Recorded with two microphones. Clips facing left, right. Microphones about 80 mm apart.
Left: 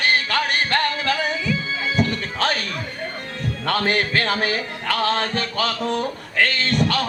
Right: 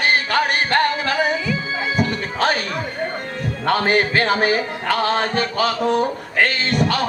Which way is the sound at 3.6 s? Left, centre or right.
Centre.